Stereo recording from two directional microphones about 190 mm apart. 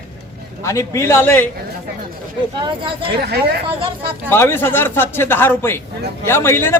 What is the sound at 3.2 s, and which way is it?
Speech, 60° right (ahead or behind).